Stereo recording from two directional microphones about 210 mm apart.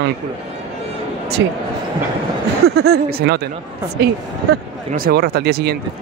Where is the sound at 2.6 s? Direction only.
50° right (ahead or behind).